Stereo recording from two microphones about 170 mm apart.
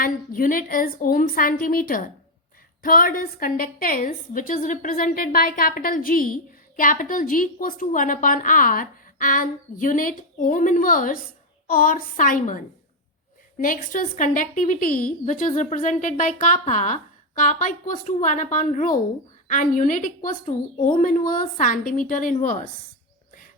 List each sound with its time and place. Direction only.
0.0 s a woman's voice: 55° left (ahead or behind)